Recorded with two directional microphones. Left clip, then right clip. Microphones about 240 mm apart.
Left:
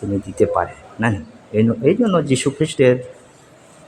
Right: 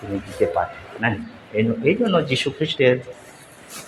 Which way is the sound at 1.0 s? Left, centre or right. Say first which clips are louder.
Left 2 dB; left.